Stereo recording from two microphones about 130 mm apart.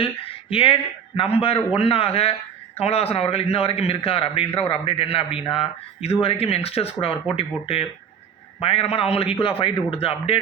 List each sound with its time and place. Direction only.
0.0 s a man's voice: 45° left (ahead or behind)